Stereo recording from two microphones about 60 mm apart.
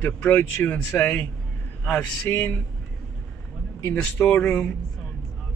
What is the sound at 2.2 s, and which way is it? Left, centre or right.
Speech, left.